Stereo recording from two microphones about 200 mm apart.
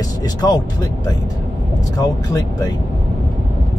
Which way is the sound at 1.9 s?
20° left (ahead or behind).